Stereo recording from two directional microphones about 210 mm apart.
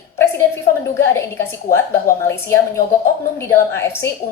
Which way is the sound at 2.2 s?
10° left (ahead or behind).